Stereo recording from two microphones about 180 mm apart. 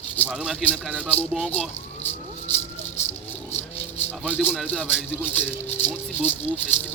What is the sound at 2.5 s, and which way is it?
Speech, 35° left (ahead or behind).